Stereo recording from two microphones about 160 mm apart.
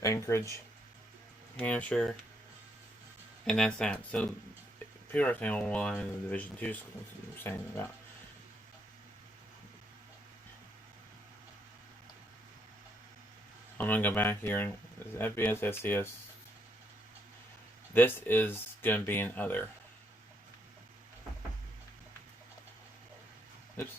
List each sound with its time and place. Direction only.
0.0 s speech: 20° left (ahead or behind)
1.5 s speech: 10° left (ahead or behind)
3.4 s speech: 5° left (ahead or behind)
13.7 s speech: 10° left (ahead or behind)
17.9 s speech: 10° left (ahead or behind)